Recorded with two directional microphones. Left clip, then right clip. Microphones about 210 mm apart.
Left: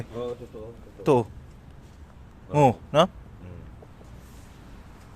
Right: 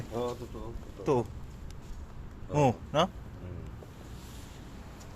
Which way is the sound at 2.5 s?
45° left (ahead or behind).